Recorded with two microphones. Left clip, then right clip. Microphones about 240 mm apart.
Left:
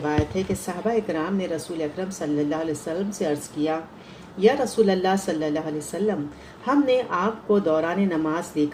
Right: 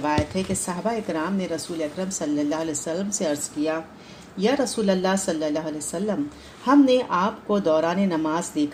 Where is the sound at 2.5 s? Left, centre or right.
Right.